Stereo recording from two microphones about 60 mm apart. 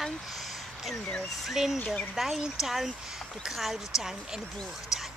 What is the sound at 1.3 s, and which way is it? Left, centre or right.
Speech, centre.